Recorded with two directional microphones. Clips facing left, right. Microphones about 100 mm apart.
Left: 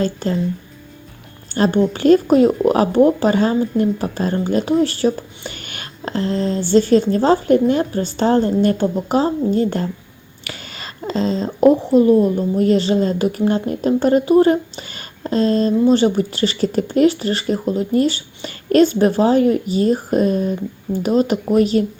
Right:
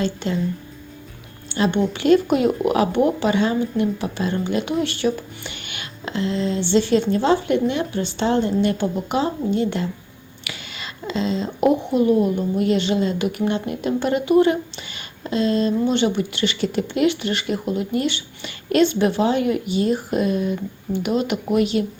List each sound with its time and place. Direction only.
0.0 s speech: 40° left (ahead or behind)
1.5 s speech: 40° left (ahead or behind)